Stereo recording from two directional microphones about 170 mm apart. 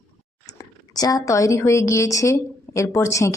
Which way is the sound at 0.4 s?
20° left (ahead or behind).